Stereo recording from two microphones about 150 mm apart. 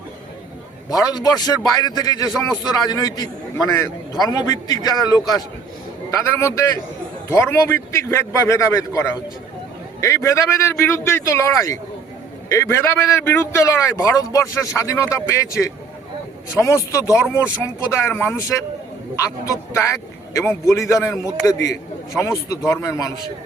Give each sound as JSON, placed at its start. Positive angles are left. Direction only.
{"t": 0.9, "sound": "speech", "side_deg": 25}